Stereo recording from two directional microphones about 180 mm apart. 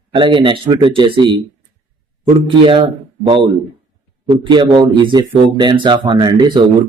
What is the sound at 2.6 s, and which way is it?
A man's voice, 30° right (ahead or behind).